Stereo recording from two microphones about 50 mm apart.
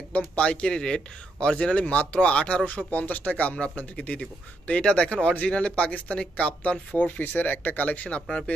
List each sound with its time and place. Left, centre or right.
0.4 s speech: centre